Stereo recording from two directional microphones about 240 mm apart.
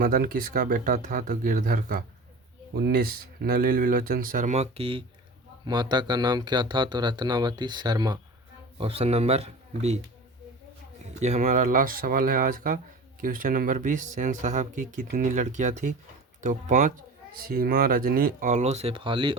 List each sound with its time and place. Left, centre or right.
0.0 s speech: right
11.2 s speech: right